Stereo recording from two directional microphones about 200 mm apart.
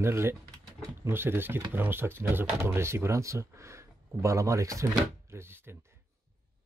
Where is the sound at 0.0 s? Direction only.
15° right (ahead or behind).